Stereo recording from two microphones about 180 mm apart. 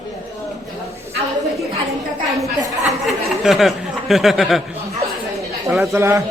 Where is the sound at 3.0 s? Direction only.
Centre (ahead or behind).